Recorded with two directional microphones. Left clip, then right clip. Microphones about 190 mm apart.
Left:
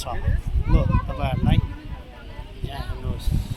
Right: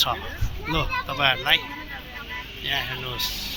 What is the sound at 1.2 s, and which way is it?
Speech, centre (ahead or behind).